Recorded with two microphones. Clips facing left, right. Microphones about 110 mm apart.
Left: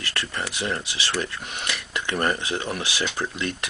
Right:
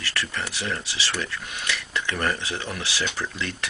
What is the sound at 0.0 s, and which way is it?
Speech, 20° left (ahead or behind).